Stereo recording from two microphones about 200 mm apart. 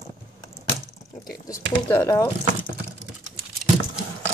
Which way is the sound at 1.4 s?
15° left (ahead or behind).